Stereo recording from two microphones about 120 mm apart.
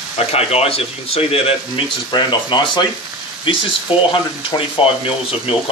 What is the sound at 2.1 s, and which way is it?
Speech, 40° left (ahead or behind).